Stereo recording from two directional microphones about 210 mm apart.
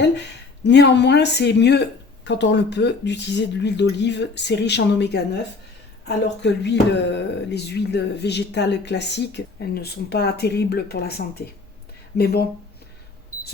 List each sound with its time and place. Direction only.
0.6 s speech: 55° left (ahead or behind)